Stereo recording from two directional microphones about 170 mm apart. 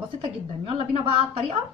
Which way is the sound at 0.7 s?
35° right (ahead or behind).